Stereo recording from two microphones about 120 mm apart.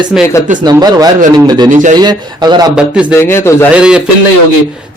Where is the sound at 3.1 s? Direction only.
20° left (ahead or behind).